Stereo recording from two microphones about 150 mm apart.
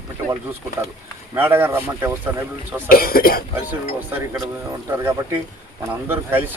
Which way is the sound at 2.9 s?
80° left.